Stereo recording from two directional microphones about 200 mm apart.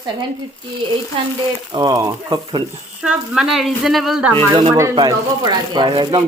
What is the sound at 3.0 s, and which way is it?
Speech, 5° right (ahead or behind).